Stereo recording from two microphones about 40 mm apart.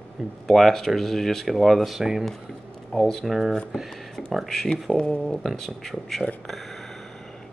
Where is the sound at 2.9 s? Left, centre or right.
Centre.